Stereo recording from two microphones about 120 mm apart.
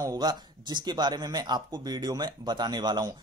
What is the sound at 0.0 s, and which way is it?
A man's voice, 35° right (ahead or behind).